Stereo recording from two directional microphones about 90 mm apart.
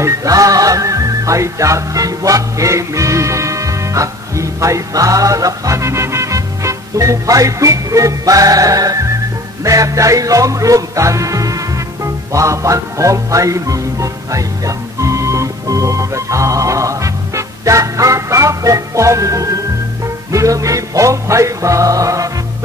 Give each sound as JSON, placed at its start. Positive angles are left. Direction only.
{"t": 0.0, "sound": "music", "side_deg": -40}